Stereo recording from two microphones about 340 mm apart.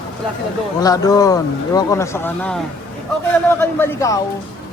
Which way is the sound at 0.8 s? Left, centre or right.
Centre.